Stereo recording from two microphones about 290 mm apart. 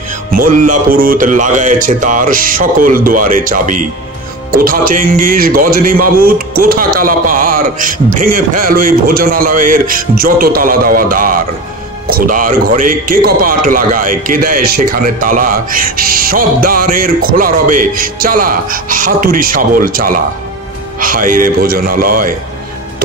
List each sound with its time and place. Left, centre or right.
0.4 s a man's voice: right